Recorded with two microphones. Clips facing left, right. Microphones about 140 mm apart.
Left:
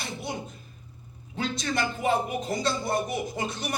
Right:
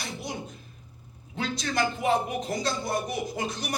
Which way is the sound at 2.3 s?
25° left (ahead or behind).